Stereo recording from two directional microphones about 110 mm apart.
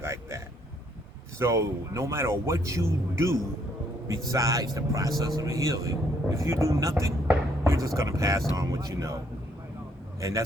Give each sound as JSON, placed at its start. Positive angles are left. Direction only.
{"t": 0.0, "sound": "a sound", "side_deg": -25}
{"t": 1.4, "sound": "a man's voice", "side_deg": -30}
{"t": 10.2, "sound": "a man's voice", "side_deg": -30}